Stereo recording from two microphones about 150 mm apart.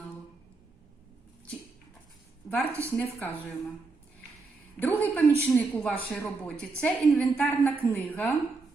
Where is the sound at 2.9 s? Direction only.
10° left (ahead or behind).